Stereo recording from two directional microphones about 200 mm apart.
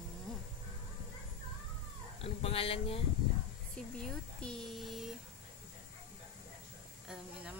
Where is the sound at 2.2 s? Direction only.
30° left (ahead or behind).